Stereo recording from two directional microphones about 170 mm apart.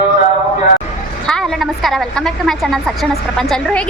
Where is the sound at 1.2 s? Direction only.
5° left (ahead or behind).